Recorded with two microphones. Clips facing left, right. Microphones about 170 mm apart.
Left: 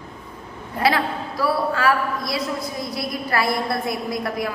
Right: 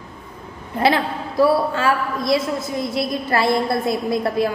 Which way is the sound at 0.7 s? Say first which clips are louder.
Right 2 dB; 25° right (ahead or behind).